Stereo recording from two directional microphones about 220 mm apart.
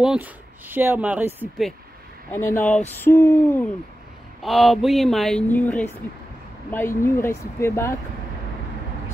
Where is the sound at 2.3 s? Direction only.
10° left (ahead or behind).